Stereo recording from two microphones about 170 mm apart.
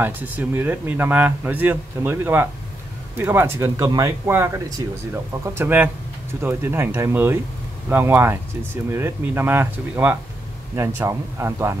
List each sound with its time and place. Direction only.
0.0 s speech: 10° right (ahead or behind)